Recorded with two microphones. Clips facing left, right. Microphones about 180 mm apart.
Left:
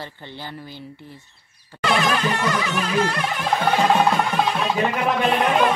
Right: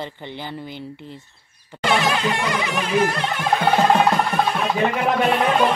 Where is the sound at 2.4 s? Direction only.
15° right (ahead or behind).